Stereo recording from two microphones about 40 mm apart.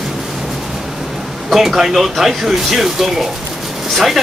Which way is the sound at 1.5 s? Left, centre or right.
Centre.